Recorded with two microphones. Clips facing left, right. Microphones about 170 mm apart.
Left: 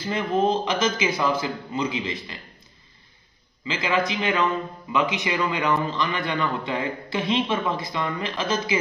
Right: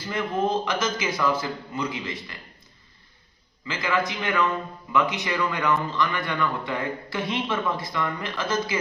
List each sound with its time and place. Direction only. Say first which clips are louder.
0.1 s a man's voice: left 3 dB; 20° left (ahead or behind)
3.6 s a man's voice: left 2 dB; 20° left (ahead or behind)